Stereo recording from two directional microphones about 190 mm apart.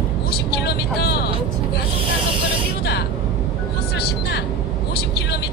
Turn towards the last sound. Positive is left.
turn(degrees=60)  # may be behind; listen again after turning